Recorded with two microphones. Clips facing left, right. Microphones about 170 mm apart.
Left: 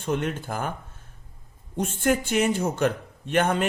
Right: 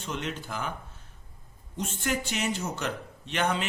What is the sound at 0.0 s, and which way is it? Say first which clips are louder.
Speech: left 7 dB; 50° left (ahead or behind).